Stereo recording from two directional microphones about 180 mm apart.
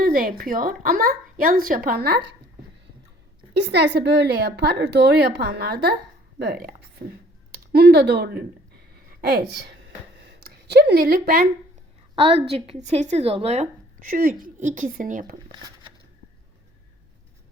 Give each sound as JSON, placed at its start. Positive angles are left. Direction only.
{"t": 0.0, "sound": "speech", "side_deg": -55}
{"t": 3.5, "sound": "speech", "side_deg": -70}
{"t": 9.0, "sound": "a sound", "side_deg": -65}
{"t": 12.1, "sound": "speech", "side_deg": -35}